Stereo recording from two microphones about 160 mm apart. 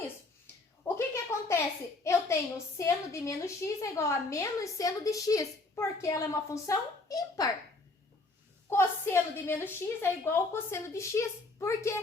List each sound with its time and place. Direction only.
0.9 s a sound: 15° left (ahead or behind)
2.0 s a woman's voice: 20° left (ahead or behind)
8.7 s a woman's voice: 15° left (ahead or behind)